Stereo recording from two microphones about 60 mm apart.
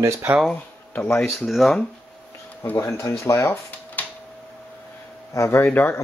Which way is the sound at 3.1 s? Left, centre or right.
Left.